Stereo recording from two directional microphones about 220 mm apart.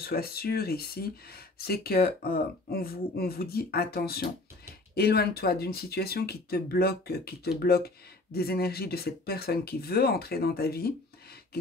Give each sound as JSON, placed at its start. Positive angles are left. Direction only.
{"t": 0.0, "sound": "speech", "side_deg": 45}